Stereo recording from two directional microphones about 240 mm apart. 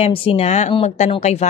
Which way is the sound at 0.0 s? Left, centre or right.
Left.